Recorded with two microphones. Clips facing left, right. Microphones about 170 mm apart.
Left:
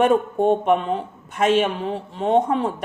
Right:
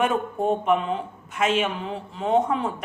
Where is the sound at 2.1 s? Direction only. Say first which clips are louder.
Left 3 dB; 35° left (ahead or behind).